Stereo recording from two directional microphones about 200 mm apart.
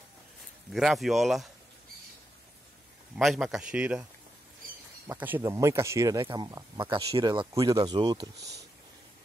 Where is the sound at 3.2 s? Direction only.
Centre (ahead or behind).